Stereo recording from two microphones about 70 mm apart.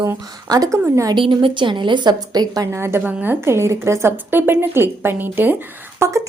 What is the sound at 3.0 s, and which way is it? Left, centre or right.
Speech, right.